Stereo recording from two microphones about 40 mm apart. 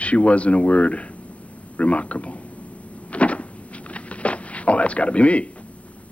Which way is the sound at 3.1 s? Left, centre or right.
Left.